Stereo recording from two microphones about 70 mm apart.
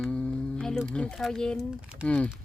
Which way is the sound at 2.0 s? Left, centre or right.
Centre.